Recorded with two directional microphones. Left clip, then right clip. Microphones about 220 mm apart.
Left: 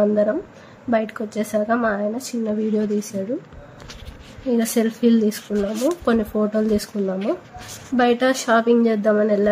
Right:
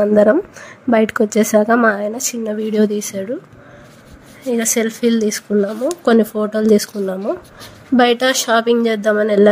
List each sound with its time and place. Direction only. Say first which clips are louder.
0.0 s speech: right 7 dB; 45° right (ahead or behind)
4.5 s speech: right 3 dB; 35° right (ahead or behind)